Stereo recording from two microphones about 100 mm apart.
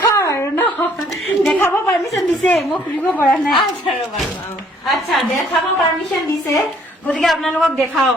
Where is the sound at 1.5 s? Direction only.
25° left (ahead or behind).